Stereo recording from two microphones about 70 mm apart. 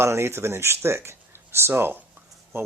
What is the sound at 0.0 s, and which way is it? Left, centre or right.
Speech, right.